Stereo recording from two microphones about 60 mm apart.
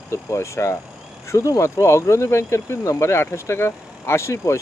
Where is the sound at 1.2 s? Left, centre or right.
Left.